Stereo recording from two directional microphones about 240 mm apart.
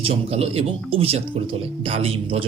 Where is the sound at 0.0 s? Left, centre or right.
Right.